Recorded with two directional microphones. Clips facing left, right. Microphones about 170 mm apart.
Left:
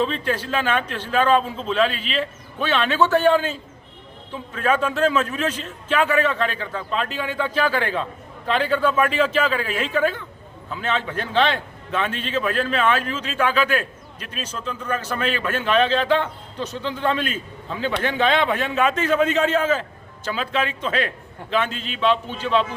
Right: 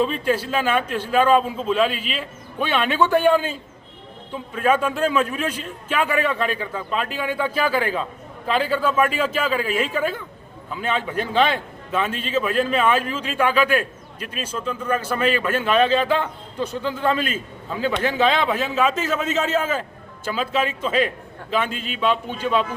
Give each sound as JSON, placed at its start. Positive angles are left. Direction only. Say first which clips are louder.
{"t": 0.0, "sound": "a man's voice", "louder": "right 2 dB", "side_deg": -10}